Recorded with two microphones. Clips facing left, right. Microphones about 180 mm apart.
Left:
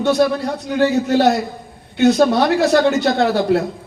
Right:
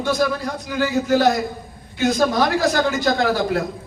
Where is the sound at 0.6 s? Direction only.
65° left (ahead or behind).